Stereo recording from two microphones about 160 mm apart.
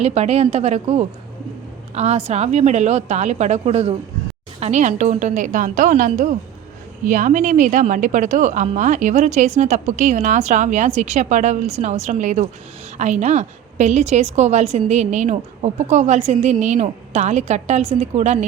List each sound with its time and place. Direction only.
0.0 s a woman's voice: 40° right (ahead or behind)